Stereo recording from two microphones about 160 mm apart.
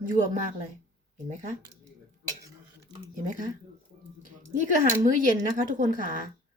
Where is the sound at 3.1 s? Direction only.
55° right (ahead or behind).